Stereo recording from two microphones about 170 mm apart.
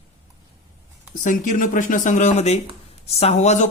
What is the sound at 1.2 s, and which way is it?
A man's voice, 50° left (ahead or behind).